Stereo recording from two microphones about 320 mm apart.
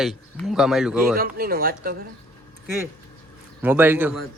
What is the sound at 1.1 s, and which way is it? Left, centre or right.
Speech, right.